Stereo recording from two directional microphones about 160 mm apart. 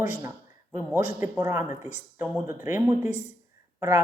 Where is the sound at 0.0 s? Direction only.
10° right (ahead or behind).